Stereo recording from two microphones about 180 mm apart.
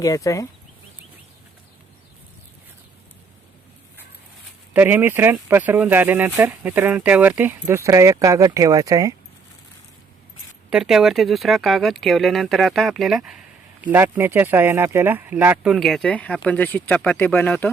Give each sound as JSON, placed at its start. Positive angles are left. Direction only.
{"t": 0.0, "sound": "speech", "side_deg": 20}
{"t": 4.7, "sound": "speech", "side_deg": -10}
{"t": 10.7, "sound": "speech", "side_deg": -5}